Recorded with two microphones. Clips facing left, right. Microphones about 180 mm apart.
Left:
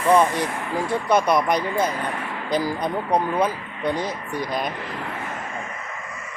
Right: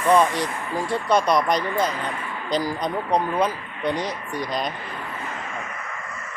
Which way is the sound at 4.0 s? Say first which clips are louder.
Left 1 dB; 15° right (ahead or behind).